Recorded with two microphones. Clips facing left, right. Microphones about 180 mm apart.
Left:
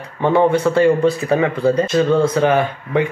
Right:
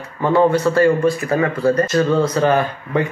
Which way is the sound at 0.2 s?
20° left (ahead or behind).